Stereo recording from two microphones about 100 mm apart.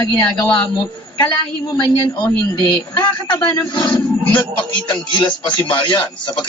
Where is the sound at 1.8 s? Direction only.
55° left (ahead or behind).